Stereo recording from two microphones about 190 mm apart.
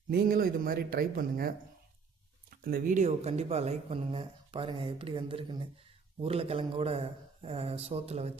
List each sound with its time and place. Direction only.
0.1 s speech: 50° right (ahead or behind); by 8.3 s 35° right (ahead or behind)